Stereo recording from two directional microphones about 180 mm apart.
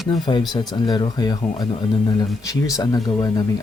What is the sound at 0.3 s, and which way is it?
Speech, 25° left (ahead or behind).